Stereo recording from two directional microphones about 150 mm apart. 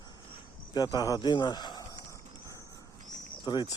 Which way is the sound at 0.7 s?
25° left (ahead or behind).